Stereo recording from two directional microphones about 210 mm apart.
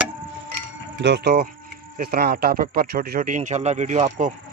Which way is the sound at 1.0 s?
55° right (ahead or behind).